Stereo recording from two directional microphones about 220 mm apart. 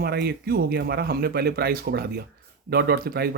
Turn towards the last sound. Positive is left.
turn(degrees=-45)  # may be behind; listen again after turning